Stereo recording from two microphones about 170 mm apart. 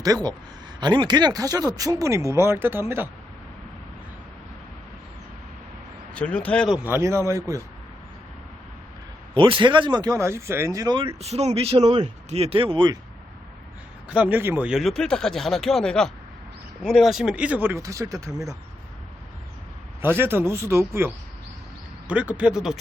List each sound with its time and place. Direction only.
0.0 s speech: 20° right (ahead or behind)
6.1 s speech: 5° left (ahead or behind)
6.8 s speech: 15° right (ahead or behind)
9.3 s speech: 30° right (ahead or behind)
11.2 s speech: 40° right (ahead or behind)
11.8 s speech: 25° right (ahead or behind)
12.3 s speech: 35° right (ahead or behind)
14.1 s speech: 10° right (ahead or behind)
20.1 s speech: 15° right (ahead or behind)